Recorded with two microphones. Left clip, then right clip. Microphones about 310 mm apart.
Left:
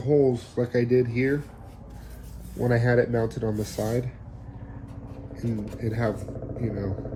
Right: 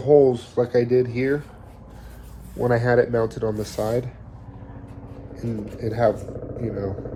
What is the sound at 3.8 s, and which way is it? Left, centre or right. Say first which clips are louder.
Speech: right 5 dB; right.